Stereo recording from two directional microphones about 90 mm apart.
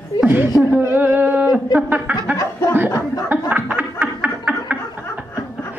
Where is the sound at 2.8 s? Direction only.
40° left (ahead or behind).